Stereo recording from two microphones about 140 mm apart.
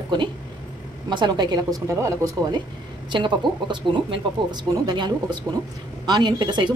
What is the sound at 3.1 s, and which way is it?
A woman's voice, 35° right (ahead or behind).